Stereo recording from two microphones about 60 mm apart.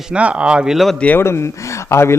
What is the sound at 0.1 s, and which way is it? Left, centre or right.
Speech, right.